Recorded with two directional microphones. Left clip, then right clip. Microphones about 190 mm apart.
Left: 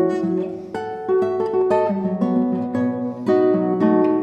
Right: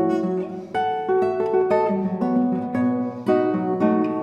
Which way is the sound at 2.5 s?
35° left (ahead or behind).